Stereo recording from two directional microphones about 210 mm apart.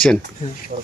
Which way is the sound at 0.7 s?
40° right (ahead or behind).